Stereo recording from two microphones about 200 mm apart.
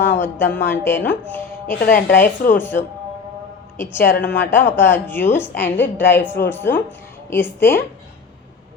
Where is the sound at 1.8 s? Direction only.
45° left (ahead or behind).